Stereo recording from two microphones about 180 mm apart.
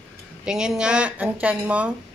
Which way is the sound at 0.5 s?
5° right (ahead or behind).